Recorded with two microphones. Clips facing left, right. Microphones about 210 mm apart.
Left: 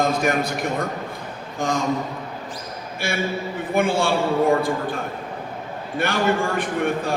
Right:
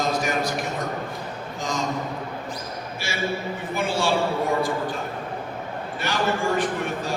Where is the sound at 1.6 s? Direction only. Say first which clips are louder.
Left 6 dB; 55° left (ahead or behind).